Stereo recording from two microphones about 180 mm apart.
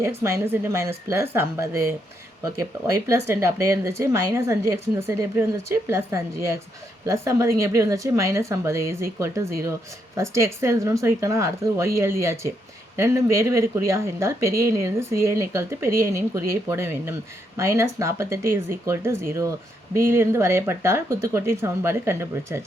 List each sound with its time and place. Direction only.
0.0 s speech: 15° right (ahead or behind)